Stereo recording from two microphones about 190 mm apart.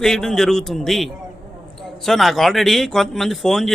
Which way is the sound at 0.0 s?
5° left (ahead or behind).